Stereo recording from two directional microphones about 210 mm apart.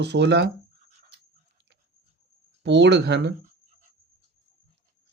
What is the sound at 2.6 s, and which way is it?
Speech, 55° right (ahead or behind).